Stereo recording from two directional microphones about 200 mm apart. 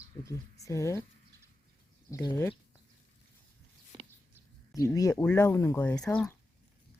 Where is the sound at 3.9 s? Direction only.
25° right (ahead or behind).